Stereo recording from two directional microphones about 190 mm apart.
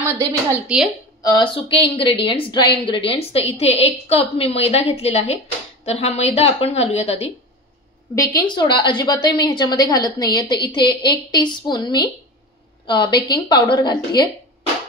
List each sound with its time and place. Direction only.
0.0 s a woman's voice: 10° right (ahead or behind)
1.2 s a woman's voice: 25° left (ahead or behind)
8.2 s a woman's voice: 20° left (ahead or behind)